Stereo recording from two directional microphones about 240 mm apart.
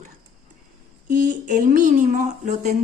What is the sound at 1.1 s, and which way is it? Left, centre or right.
Speech, right.